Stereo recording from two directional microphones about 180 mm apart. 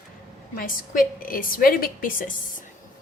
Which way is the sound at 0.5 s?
50° left (ahead or behind).